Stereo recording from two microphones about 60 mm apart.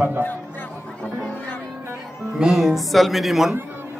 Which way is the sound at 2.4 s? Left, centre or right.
Centre.